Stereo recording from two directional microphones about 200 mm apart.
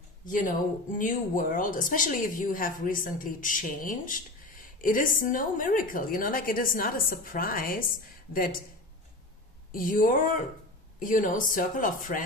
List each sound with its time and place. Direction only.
0.2 s speech: 40° left (ahead or behind)
9.7 s speech: 45° left (ahead or behind)